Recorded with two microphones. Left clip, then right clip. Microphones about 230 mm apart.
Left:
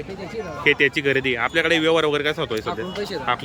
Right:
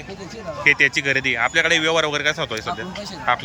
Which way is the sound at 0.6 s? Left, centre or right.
Centre.